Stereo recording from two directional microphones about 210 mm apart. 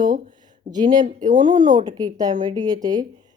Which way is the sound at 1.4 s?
20° right (ahead or behind).